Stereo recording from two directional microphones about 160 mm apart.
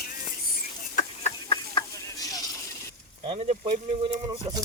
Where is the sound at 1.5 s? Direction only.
25° left (ahead or behind).